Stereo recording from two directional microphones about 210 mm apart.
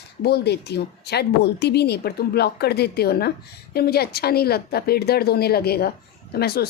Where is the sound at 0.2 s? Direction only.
50° left (ahead or behind).